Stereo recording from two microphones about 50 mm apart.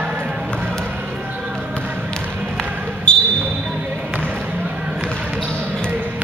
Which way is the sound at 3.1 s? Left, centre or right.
Left.